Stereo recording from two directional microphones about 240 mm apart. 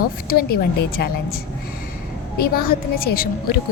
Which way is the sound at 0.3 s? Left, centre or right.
Left.